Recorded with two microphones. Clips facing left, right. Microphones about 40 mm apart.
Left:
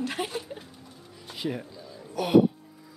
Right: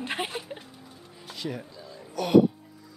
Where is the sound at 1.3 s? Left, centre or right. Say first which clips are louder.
Left 2 dB; centre.